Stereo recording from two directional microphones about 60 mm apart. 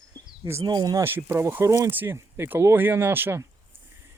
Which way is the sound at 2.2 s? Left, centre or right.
Right.